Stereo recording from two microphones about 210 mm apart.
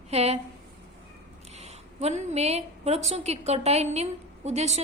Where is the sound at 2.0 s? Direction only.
30° right (ahead or behind).